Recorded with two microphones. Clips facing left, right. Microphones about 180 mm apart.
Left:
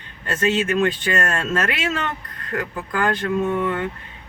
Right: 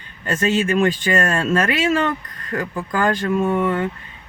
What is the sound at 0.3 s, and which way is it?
Speech, 10° right (ahead or behind).